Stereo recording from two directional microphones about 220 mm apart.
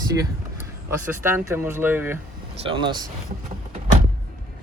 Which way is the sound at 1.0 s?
10° right (ahead or behind).